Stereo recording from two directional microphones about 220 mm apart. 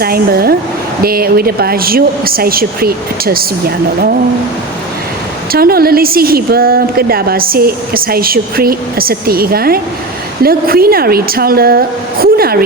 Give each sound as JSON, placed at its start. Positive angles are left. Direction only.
{"t": 0.0, "sound": "a woman's voice", "side_deg": -45}
{"t": 5.5, "sound": "a woman's voice", "side_deg": -45}